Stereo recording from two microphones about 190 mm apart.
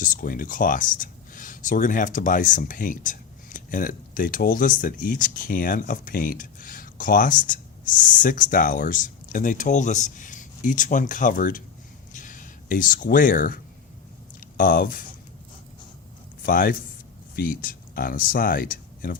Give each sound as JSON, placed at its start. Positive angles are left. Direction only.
{"t": 0.0, "sound": "speech", "side_deg": 45}
{"t": 12.1, "sound": "a sound", "side_deg": 45}
{"t": 14.5, "sound": "speech", "side_deg": 45}
{"t": 16.4, "sound": "speech", "side_deg": 50}